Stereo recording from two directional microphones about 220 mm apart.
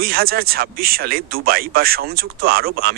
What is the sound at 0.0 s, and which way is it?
Speech, 45° right (ahead or behind).